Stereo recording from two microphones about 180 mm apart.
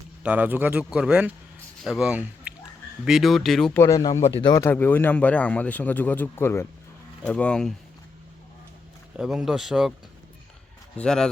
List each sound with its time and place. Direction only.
0.2 s a man's voice: 10° right (ahead or behind)
3.8 s speech: 20° left (ahead or behind)
9.1 s speech: 5° right (ahead or behind)
10.9 s speech: 5° left (ahead or behind)